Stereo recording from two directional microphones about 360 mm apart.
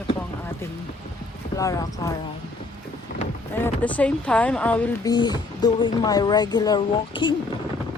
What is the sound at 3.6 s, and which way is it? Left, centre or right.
Speech, centre.